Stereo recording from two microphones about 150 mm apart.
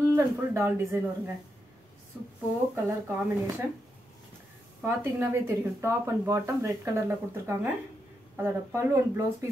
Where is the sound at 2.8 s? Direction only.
15° right (ahead or behind).